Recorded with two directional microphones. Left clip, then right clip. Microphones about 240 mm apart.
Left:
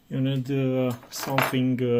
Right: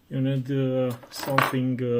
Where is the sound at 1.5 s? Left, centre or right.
Left.